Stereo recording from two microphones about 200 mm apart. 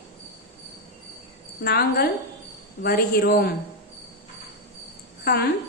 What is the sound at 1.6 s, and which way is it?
A woman's voice, 50° left (ahead or behind).